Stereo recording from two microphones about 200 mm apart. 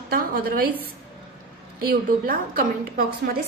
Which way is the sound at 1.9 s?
45° right (ahead or behind).